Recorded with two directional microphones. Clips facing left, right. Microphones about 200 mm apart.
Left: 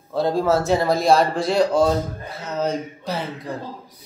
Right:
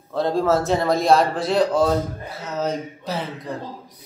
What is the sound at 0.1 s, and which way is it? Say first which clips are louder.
A man's voice: even; centre (ahead or behind).